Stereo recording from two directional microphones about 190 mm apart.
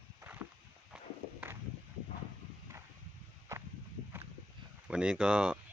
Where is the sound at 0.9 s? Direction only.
5° right (ahead or behind).